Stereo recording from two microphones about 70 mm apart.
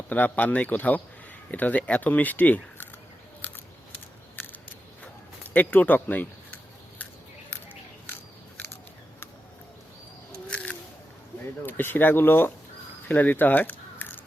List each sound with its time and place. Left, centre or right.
0.1 s speech: left
5.4 s speech: left
10.4 s a sound: centre
11.6 s speech: left